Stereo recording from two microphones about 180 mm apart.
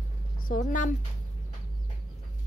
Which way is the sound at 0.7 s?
45° left (ahead or behind).